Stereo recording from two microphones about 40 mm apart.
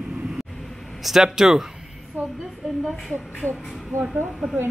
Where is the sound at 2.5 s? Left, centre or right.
Centre.